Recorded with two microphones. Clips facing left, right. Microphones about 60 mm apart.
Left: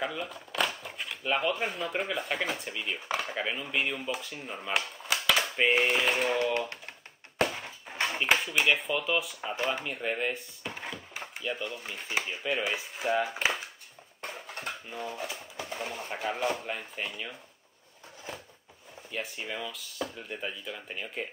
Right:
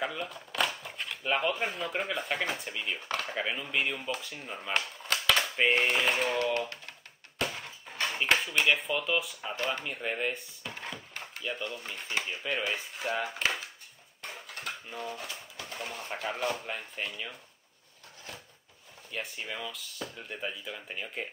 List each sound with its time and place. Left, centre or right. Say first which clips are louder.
0.0 s speech: left 1 dB; centre
7.4 s a sound: left 2 dB; centre
8.2 s speech: even; centre
10.6 s a sound: left 2 dB; centre
11.4 s speech: left 1 dB; centre
14.2 s dishes: left 2 dB; left
15.0 s speech: left 3 dB; centre
15.5 s a sound: left 1 dB; centre
16.0 s speech: left 2 dB; centre
19.1 s speech: left 2 dB; centre